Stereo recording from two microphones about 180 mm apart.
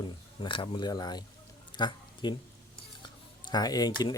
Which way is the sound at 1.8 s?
25° left (ahead or behind).